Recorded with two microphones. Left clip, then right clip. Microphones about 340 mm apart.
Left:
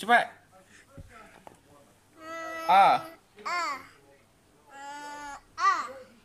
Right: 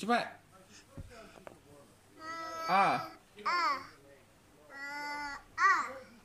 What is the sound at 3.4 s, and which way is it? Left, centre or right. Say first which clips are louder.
Babbling: even; centre.